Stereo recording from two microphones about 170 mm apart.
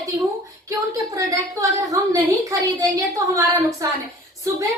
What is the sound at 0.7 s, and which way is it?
Speech, 20° right (ahead or behind).